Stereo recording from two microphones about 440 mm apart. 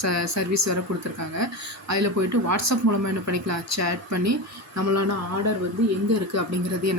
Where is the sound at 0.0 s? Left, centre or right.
Right.